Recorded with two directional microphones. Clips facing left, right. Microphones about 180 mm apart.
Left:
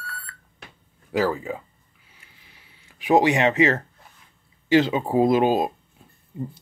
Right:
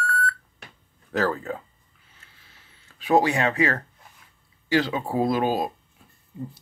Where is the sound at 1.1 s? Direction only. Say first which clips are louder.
Left 2 dB; 10° left (ahead or behind).